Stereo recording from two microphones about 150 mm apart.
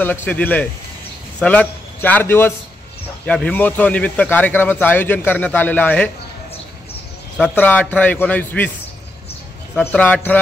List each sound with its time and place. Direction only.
0.0 s a man's voice: 15° left (ahead or behind)
7.3 s a man's voice: 10° left (ahead or behind)
9.8 s a man's voice: 10° left (ahead or behind)